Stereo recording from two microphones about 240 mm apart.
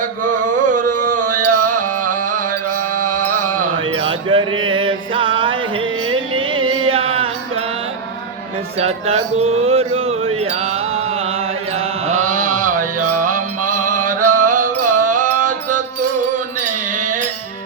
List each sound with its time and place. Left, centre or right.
0.7 s a sound: right
1.5 s music: right
1.7 s music: right
3.9 s music: right
8.8 s a sound: right
12.3 s mantra: right
13.1 s music: right
16.6 s mantra: right